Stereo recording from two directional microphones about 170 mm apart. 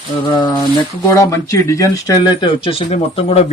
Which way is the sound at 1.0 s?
20° left (ahead or behind).